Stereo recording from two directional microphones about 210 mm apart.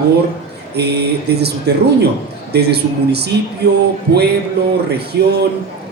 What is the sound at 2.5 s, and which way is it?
Speech, 50° right (ahead or behind).